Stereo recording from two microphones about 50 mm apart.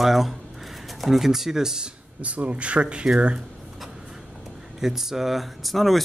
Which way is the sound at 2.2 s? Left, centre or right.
Right.